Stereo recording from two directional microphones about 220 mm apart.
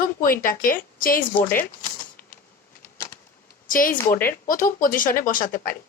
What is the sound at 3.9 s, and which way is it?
Speech, 10° left (ahead or behind).